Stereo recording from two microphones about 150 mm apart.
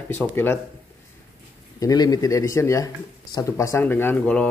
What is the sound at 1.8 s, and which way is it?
Speech, 25° left (ahead or behind).